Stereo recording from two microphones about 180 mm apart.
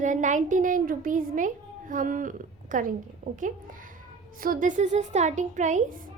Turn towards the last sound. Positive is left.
turn(degrees=-45)  # may be behind; listen again after turning